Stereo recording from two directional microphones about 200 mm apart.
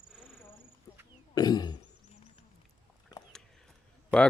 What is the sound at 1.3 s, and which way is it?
Speech, 20° left (ahead or behind).